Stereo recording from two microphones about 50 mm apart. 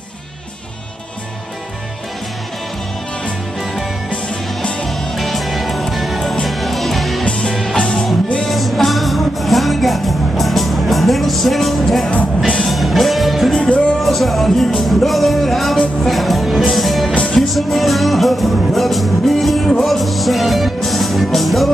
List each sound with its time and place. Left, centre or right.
4.8 s music: centre
7.2 s music: centre
8.5 s music: centre
13.6 s music: centre
14.0 s music: centre
17.1 s music: left
17.4 s music: centre